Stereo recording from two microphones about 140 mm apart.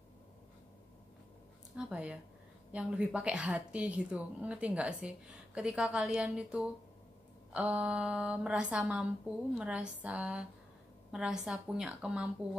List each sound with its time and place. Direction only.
1.8 s a woman's voice: 10° right (ahead or behind)